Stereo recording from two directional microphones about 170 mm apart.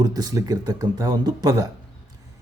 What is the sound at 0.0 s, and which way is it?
A man's voice, 25° right (ahead or behind).